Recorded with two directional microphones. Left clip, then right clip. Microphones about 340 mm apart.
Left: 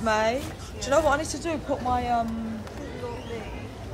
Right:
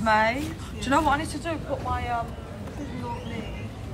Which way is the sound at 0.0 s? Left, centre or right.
Centre.